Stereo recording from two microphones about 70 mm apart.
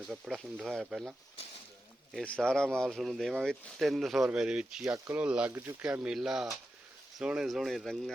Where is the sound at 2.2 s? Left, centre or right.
Centre.